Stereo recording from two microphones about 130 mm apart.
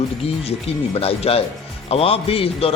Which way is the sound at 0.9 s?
50° left (ahead or behind).